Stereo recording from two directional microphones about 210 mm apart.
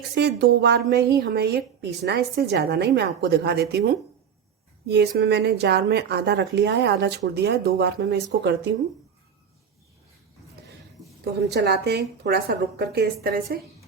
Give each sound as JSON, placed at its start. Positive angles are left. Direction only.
{"t": 0.1, "sound": "a woman's voice", "side_deg": -55}
{"t": 11.4, "sound": "a woman's voice", "side_deg": -50}